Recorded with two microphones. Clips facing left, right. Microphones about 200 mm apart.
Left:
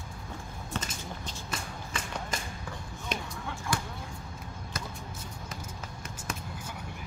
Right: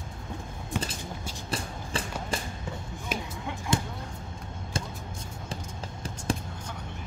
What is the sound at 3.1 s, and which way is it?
Basketball bounce, 5° right (ahead or behind).